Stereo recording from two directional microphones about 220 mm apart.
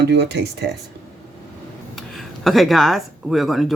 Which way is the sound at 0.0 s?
50° right (ahead or behind).